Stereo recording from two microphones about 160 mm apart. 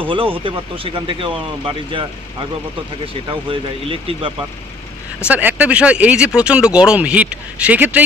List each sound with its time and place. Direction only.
0.0 s speech: 35° right (ahead or behind)
3.3 s speech: 35° right (ahead or behind)
5.3 s speech: 10° right (ahead or behind)